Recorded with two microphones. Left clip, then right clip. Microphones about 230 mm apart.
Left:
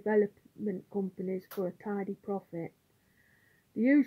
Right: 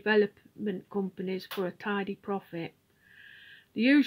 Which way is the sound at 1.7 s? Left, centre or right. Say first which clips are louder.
Right 4 dB; centre.